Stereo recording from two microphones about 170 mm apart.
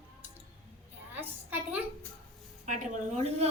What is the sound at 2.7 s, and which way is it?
Speech, 45° right (ahead or behind).